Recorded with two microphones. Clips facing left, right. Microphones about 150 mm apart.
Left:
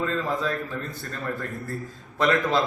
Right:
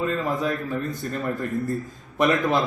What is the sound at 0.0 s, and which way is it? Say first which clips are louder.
A man's voice: right 2 dB; 20° right (ahead or behind).